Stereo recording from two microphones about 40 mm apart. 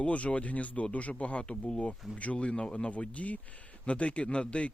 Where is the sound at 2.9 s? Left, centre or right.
Left.